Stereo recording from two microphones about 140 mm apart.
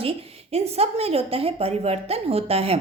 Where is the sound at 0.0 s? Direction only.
45° right (ahead or behind).